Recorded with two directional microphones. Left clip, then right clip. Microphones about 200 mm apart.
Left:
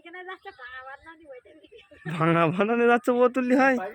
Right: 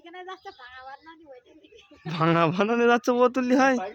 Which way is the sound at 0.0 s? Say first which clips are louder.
Even; 55° right (ahead or behind).